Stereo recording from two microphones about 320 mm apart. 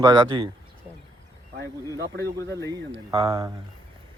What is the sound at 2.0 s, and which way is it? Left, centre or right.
Speech, right.